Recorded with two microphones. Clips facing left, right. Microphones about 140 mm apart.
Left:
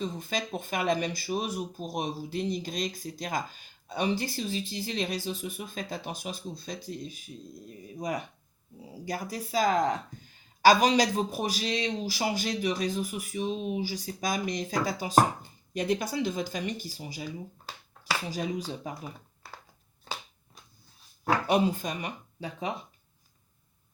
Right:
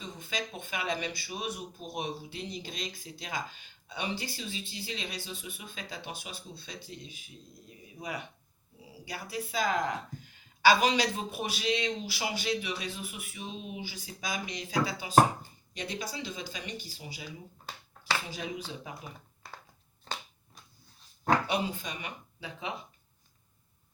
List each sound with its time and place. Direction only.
0.0 s speech: 40° left (ahead or behind)
18.3 s speech: 40° left (ahead or behind)
19.4 s a sound: 5° left (ahead or behind)
21.4 s speech: 45° left (ahead or behind)